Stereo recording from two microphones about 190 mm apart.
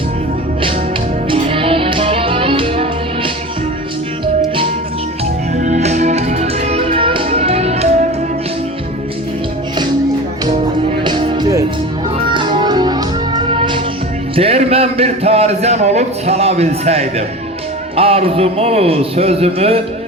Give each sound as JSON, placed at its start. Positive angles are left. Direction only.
{"t": 1.3, "sound": "music", "side_deg": -30}
{"t": 5.5, "sound": "music", "side_deg": -40}
{"t": 11.0, "sound": "music", "side_deg": -25}
{"t": 14.3, "sound": "a sound", "side_deg": -30}
{"t": 17.9, "sound": "speech", "side_deg": -30}